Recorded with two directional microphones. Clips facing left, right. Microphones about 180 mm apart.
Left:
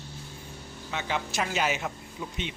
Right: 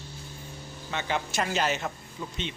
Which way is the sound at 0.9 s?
Centre (ahead or behind).